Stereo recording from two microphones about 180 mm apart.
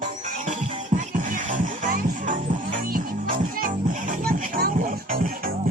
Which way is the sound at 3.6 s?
50° right (ahead or behind).